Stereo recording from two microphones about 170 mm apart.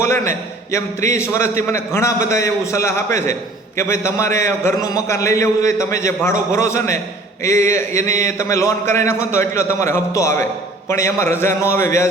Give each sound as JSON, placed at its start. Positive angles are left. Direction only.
{"t": 0.0, "sound": "a man's voice", "side_deg": 15}